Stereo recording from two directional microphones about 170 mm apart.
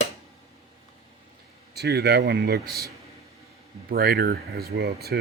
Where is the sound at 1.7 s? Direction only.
75° right (ahead or behind).